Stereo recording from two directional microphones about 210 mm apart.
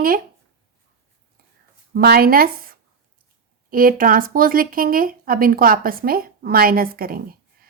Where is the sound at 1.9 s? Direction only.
45° right (ahead or behind).